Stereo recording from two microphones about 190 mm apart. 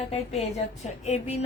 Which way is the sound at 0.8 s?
35° left (ahead or behind).